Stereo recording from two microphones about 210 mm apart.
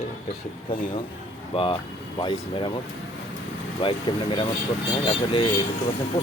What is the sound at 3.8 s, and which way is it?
Speech, 25° left (ahead or behind).